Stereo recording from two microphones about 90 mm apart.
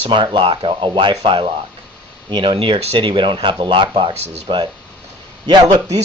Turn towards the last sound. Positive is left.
turn(degrees=-55)  # may be behind; listen again after turning